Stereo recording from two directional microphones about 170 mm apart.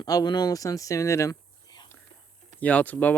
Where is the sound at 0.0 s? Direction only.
25° left (ahead or behind).